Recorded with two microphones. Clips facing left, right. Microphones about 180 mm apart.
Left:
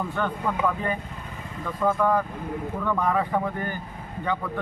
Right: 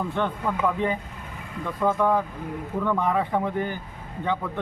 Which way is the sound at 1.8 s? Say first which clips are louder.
Even; 5° right (ahead or behind).